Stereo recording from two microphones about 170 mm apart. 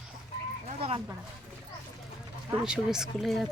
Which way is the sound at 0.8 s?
35° right (ahead or behind).